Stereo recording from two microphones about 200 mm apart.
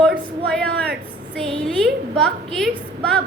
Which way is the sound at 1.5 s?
5° left (ahead or behind).